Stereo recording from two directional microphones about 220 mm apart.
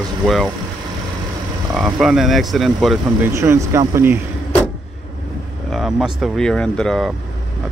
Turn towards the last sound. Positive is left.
turn(degrees=0)  # may be behind; listen again after turning